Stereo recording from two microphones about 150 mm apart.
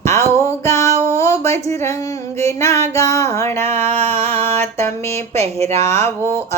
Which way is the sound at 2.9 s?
20° left (ahead or behind).